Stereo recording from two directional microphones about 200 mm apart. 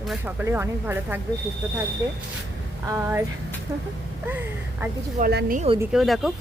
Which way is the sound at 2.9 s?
10° right (ahead or behind).